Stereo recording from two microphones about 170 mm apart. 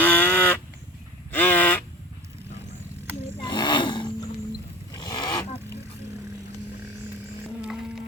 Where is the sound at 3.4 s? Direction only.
25° left (ahead or behind).